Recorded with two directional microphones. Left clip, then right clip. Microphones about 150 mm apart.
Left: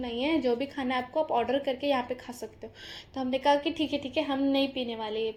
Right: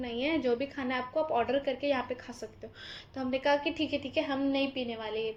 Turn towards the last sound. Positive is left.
turn(degrees=35)  # may be behind; listen again after turning